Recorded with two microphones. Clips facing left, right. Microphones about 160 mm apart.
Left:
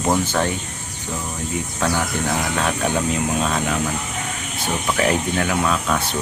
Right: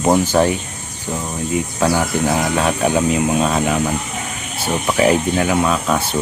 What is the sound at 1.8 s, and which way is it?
Speech, 25° right (ahead or behind).